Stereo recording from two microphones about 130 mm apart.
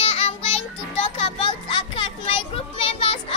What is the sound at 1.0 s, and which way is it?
Children playing, 45° left (ahead or behind).